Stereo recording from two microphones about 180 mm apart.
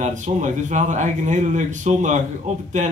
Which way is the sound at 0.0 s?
40° right (ahead or behind).